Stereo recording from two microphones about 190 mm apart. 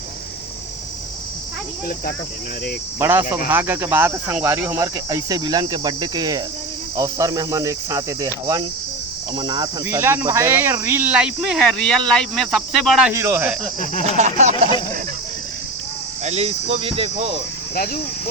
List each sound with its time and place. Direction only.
3.0 s speech: 10° right (ahead or behind)
6.9 s cricket: 20° right (ahead or behind)
9.8 s speech: 15° right (ahead or behind)
13.1 s speech: 15° right (ahead or behind)
14.2 s speech: 35° right (ahead or behind)
16.2 s speech: 35° right (ahead or behind)